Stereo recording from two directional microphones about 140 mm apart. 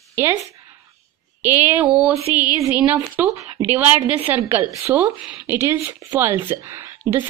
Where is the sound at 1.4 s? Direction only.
15° right (ahead or behind).